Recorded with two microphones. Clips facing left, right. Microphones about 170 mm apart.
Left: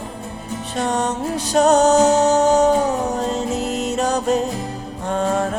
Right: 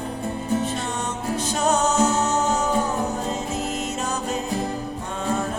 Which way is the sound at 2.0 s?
75° left (ahead or behind).